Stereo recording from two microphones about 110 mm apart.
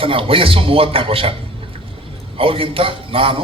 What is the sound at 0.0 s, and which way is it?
A man's voice, 55° right (ahead or behind).